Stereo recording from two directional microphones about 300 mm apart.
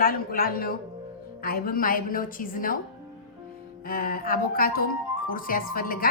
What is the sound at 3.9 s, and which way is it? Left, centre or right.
Speech, left.